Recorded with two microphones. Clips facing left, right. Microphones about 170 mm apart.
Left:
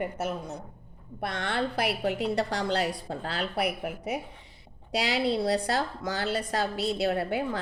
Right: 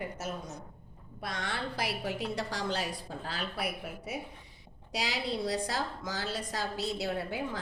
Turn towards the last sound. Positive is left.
turn(degrees=65)  # may be behind; listen again after turning